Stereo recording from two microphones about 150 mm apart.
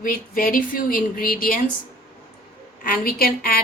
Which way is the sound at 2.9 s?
80° left.